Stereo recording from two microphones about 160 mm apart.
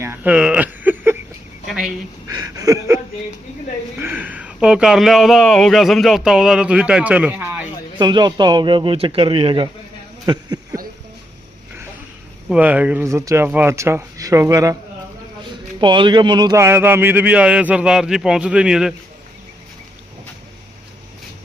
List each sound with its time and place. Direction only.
0.0 s a sound: 15° right (ahead or behind)
2.2 s a sound: 20° right (ahead or behind)
4.0 s speech: 10° right (ahead or behind)
7.9 s a man's voice: 25° right (ahead or behind)
12.5 s speech: 10° right (ahead or behind)
15.8 s speech: 30° right (ahead or behind); by 18.9 s 5° right (ahead or behind)